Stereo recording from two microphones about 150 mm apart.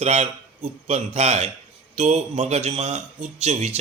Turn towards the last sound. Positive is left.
turn(degrees=-50)  # may be behind; listen again after turning